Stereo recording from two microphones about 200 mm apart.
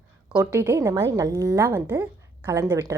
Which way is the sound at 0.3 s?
15° right (ahead or behind).